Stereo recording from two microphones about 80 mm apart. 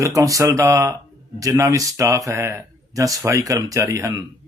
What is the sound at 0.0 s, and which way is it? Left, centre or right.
Speech, right.